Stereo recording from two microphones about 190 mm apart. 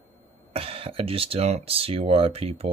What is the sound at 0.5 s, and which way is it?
Speech, 30° right (ahead or behind).